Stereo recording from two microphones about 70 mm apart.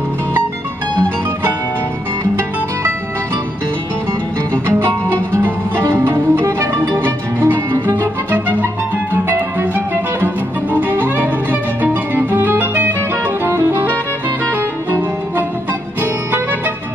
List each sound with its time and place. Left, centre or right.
5.3 s music: right
7.0 s music: right